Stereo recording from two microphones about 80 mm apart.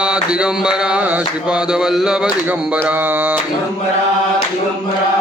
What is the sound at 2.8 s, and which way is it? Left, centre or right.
Speech, right.